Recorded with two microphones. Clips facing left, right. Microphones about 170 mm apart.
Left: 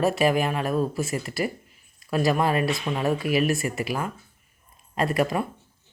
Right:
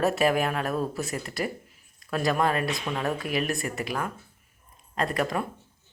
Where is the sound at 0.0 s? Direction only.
Centre (ahead or behind).